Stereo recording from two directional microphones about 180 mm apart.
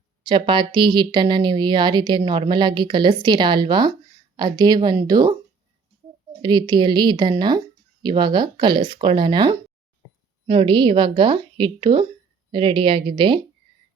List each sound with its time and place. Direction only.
0.2 s speech: 25° right (ahead or behind)
6.4 s speech: 25° right (ahead or behind)